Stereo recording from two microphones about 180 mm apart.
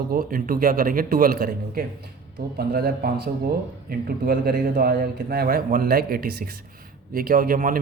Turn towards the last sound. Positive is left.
turn(degrees=-50)  # may be behind; listen again after turning